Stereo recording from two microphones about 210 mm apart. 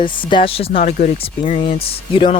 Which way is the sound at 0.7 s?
45° left (ahead or behind).